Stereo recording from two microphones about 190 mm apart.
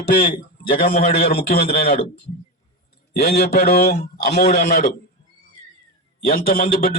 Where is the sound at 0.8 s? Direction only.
50° left (ahead or behind).